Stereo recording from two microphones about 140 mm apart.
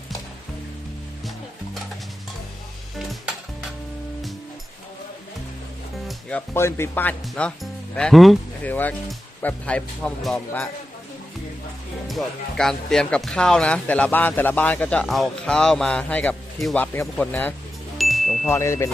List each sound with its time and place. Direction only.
6.5 s speech: 20° left (ahead or behind); by 8.4 s centre (ahead or behind)
8.6 s speech: 10° left (ahead or behind)
12.0 s speech: centre (ahead or behind)
17.9 s chime: centre (ahead or behind)
18.4 s speech: 20° left (ahead or behind)